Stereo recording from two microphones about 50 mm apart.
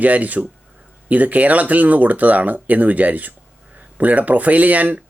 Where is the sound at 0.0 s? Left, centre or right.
Right.